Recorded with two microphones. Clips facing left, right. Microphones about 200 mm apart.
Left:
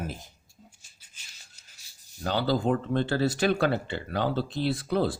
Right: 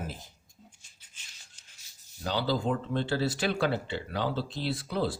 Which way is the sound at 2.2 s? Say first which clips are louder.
Left 3 dB; 50° left (ahead or behind).